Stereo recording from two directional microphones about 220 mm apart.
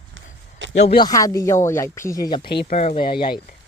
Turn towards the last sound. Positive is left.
turn(degrees=25)  # may be behind; listen again after turning